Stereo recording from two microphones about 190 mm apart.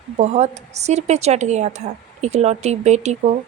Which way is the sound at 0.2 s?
35° right (ahead or behind).